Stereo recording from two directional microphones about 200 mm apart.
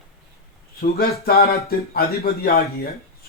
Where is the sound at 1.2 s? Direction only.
50° left (ahead or behind).